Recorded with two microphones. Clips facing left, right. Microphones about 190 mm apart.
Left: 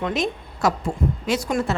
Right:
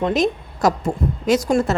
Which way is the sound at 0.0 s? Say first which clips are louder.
Right 5 dB; 40° right (ahead or behind).